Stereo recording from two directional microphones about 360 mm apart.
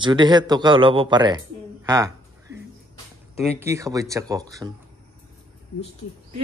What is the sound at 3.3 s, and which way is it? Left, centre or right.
Speech, centre.